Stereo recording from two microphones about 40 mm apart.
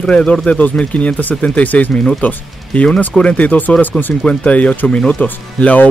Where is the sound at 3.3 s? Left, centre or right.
Left.